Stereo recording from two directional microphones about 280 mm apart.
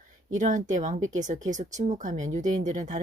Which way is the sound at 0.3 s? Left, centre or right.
Right.